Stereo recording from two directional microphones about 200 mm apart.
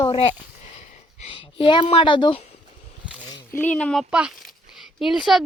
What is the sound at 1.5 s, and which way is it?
Speech, 25° left (ahead or behind).